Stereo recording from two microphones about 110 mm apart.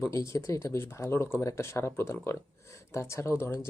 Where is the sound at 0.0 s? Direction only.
30° left (ahead or behind).